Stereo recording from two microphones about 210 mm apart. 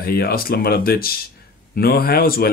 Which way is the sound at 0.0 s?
45° left (ahead or behind).